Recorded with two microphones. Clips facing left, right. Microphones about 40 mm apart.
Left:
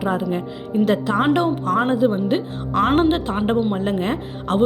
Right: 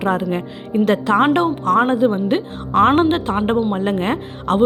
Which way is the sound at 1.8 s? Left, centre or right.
Right.